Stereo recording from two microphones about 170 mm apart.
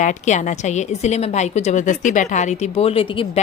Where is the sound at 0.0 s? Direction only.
45° left (ahead or behind).